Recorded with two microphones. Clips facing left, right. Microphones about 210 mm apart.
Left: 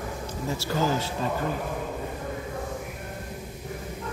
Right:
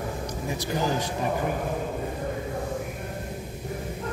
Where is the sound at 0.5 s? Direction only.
15° right (ahead or behind).